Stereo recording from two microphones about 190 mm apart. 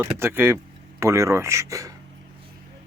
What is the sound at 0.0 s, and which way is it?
Speech, 10° right (ahead or behind).